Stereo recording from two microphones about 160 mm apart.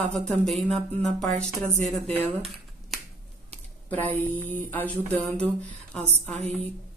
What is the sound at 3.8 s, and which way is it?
Speech, 10° left (ahead or behind).